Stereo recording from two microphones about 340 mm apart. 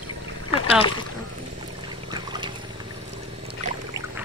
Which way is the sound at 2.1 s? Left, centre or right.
Centre.